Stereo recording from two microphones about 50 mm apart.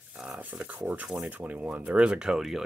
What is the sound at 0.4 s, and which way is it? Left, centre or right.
Speech, right.